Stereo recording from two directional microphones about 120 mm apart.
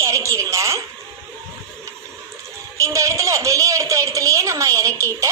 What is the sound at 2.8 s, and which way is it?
A woman's voice, 25° right (ahead or behind).